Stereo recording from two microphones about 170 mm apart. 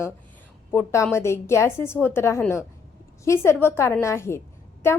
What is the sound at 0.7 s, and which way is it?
A woman's voice, 15° left (ahead or behind).